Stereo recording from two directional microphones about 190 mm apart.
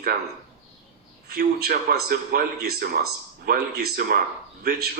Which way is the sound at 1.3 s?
55° right (ahead or behind).